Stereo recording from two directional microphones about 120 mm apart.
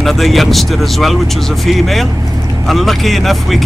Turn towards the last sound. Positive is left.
turn(degrees=0)  # may be behind; listen again after turning